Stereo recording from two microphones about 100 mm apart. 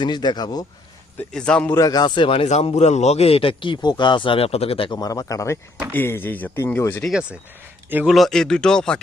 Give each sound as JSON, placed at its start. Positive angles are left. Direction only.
{"t": 0.0, "sound": "speech", "side_deg": 45}
{"t": 1.3, "sound": "speech", "side_deg": 10}
{"t": 1.7, "sound": "speech", "side_deg": 40}
{"t": 2.3, "sound": "speech", "side_deg": 75}
{"t": 4.9, "sound": "speech", "side_deg": 40}
{"t": 5.9, "sound": "speech", "side_deg": 20}
{"t": 7.1, "sound": "speech", "side_deg": -10}